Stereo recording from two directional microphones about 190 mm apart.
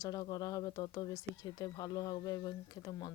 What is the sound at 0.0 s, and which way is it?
Speech, 20° left (ahead or behind).